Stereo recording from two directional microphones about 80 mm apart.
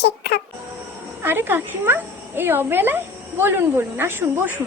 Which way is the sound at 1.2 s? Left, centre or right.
Right.